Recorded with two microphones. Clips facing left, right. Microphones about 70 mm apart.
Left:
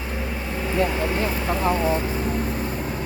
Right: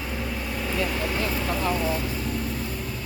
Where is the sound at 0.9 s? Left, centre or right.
Centre.